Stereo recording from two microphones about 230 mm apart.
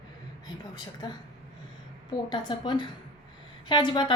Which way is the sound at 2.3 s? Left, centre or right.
Left.